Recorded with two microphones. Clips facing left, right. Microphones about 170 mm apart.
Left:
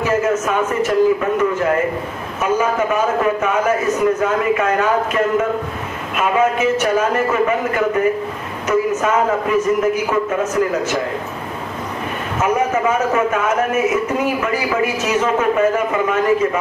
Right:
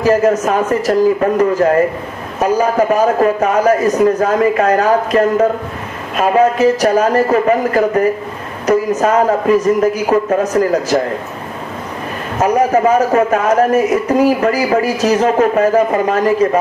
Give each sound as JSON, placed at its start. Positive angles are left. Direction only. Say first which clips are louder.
{"t": 0.0, "sound": "speech", "louder": "right 5 dB", "side_deg": -35}
{"t": 12.4, "sound": "speech", "louder": "right 5 dB", "side_deg": -35}